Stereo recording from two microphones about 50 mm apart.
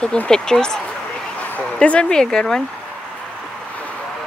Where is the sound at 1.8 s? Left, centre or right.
Left.